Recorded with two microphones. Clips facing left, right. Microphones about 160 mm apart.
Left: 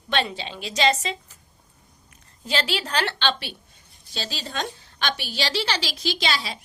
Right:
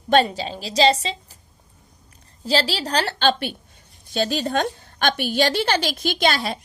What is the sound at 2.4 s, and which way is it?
A woman's voice, 35° right (ahead or behind).